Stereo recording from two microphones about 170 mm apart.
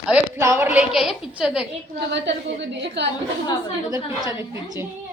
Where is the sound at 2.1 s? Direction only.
90° right.